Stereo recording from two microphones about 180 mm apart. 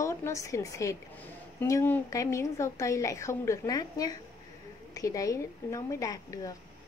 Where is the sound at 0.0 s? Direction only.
15° left (ahead or behind).